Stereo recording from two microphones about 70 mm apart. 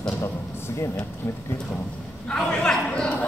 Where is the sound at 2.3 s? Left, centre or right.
Centre.